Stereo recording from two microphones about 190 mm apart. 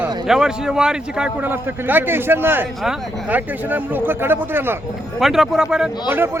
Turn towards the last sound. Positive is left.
turn(degrees=-10)  # may be behind; listen again after turning